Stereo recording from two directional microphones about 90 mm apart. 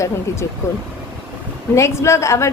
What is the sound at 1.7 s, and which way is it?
Speech, 30° left (ahead or behind).